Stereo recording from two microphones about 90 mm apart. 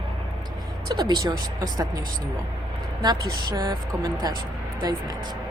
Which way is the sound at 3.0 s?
45° right (ahead or behind).